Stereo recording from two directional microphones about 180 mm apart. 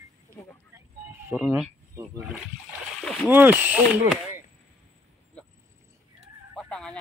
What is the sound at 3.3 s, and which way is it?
Speech, 10° right (ahead or behind).